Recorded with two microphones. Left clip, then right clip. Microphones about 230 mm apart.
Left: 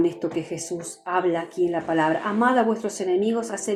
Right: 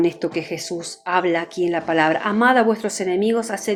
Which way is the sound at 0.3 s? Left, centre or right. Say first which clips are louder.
Right 3 dB; right.